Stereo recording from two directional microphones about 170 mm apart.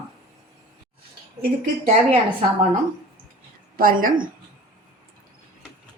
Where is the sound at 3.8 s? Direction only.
55° right (ahead or behind).